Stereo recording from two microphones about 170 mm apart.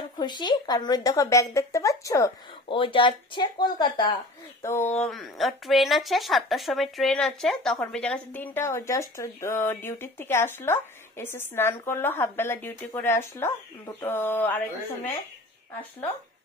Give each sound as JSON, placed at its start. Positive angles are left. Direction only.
{"t": 0.2, "sound": "speech", "side_deg": 25}
{"t": 2.7, "sound": "speech", "side_deg": 30}